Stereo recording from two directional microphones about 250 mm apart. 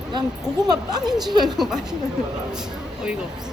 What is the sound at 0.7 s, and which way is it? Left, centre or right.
Speech, centre.